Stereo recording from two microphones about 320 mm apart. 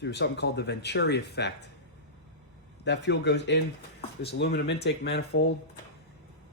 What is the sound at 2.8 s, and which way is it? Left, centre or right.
Speech, left.